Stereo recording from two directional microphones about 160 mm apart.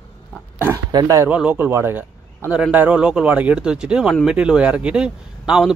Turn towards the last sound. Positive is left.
turn(degrees=-5)  # may be behind; listen again after turning